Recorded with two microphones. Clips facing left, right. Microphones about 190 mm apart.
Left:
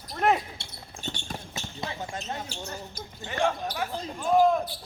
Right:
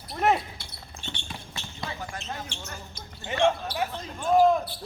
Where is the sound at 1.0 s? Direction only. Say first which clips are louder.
Left 4 dB; 40° left (ahead or behind).